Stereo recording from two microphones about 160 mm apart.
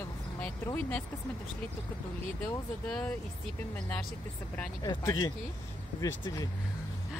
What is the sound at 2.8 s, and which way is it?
Speech, 5° left (ahead or behind).